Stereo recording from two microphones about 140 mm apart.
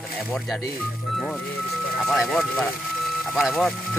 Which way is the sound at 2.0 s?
Centre (ahead or behind).